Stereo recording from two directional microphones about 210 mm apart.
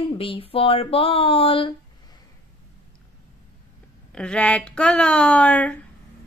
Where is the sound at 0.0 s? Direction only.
25° left (ahead or behind).